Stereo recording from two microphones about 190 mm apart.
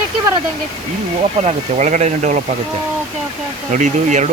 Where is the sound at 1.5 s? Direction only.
40° right (ahead or behind).